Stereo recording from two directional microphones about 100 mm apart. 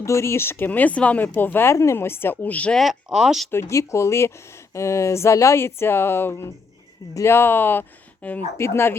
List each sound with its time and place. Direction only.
0.0 s speech: 30° left (ahead or behind)
2.7 s speech: 5° right (ahead or behind)
3.5 s speech: 25° left (ahead or behind)